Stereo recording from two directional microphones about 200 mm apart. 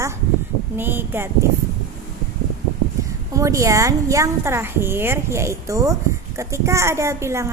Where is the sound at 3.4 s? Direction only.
15° right (ahead or behind).